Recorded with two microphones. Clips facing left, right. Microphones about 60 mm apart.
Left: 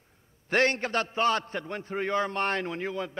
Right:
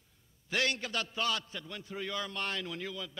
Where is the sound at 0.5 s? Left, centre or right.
Left.